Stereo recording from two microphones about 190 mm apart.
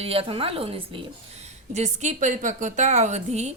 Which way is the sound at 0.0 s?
30° right (ahead or behind).